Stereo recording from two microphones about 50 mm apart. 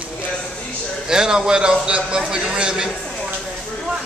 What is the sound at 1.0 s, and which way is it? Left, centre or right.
A man's voice, centre.